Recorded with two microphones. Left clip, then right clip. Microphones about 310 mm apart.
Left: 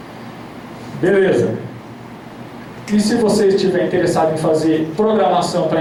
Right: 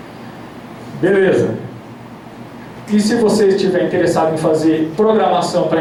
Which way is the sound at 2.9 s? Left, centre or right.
Centre.